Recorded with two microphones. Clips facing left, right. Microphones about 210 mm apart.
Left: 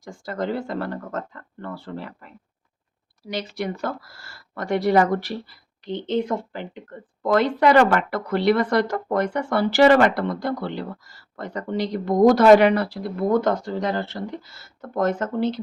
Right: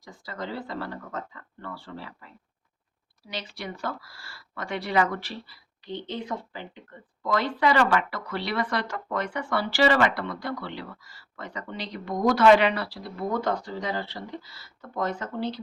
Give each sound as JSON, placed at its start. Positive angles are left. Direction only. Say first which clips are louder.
{"t": 0.0, "sound": "speech", "louder": "left 9 dB", "side_deg": 50}
{"t": 6.2, "sound": "speech", "louder": "left 7 dB", "side_deg": 55}